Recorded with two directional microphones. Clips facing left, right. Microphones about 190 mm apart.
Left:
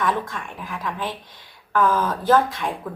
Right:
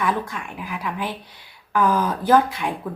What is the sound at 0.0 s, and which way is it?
A woman's voice, 10° right (ahead or behind).